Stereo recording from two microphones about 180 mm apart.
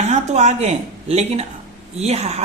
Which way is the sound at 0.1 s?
40° right (ahead or behind).